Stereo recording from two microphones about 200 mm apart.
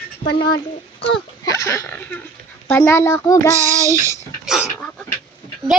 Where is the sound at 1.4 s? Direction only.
15° left (ahead or behind).